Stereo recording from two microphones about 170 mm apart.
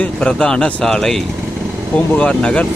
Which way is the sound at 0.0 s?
5° left (ahead or behind).